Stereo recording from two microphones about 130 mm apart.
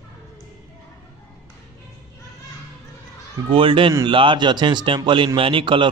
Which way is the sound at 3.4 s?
40° right (ahead or behind).